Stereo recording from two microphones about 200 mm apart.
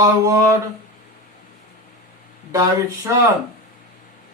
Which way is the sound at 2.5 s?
15° right (ahead or behind).